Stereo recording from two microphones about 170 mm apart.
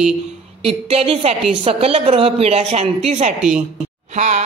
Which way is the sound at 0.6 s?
35° right (ahead or behind).